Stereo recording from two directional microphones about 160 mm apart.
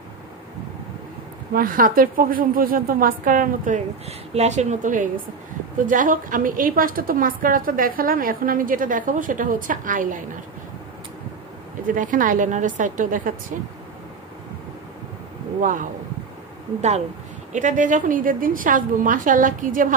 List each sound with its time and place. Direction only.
1.5 s a woman's voice: 65° right (ahead or behind)
4.3 s a woman's voice: 45° right (ahead or behind)
11.9 s a woman's voice: 55° right (ahead or behind)
15.6 s a woman's voice: 60° right (ahead or behind)
17.5 s a woman's voice: 50° right (ahead or behind)